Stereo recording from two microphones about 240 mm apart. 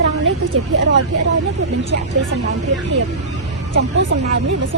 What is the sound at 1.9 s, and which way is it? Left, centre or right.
Speech, right.